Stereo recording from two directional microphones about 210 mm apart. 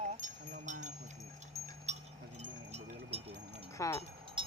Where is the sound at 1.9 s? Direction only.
30° right (ahead or behind).